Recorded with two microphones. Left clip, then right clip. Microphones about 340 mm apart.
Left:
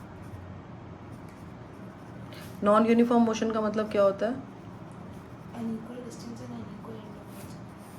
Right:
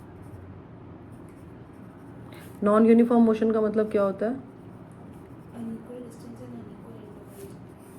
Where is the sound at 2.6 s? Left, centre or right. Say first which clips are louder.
Right 2 dB; centre.